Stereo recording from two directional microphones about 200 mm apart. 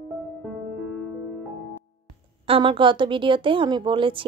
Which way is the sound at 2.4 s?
25° right (ahead or behind).